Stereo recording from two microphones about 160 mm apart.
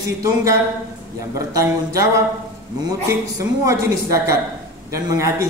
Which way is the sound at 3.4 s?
20° right (ahead or behind).